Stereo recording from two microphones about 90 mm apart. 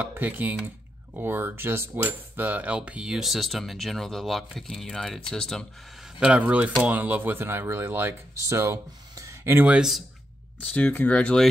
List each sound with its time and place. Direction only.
0.0 s speech: 20° right (ahead or behind)
1.1 s cutlery: 20° right (ahead or behind); by 5.7 s 5° left (ahead or behind)
5.9 s speech: 10° right (ahead or behind); by 9.7 s 30° right (ahead or behind)
9.7 s cutlery: 5° right (ahead or behind)
10.6 s speech: 15° left (ahead or behind)